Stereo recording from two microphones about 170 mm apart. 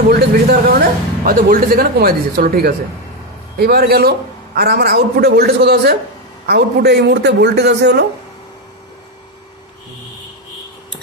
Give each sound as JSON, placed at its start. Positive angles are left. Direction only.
{"t": 0.1, "sound": "a woman's voice", "side_deg": -60}